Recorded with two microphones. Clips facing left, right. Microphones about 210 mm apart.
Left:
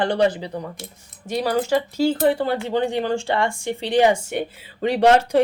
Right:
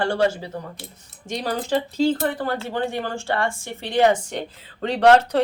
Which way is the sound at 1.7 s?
10° left (ahead or behind).